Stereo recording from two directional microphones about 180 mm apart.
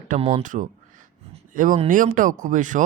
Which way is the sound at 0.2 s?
35° right (ahead or behind).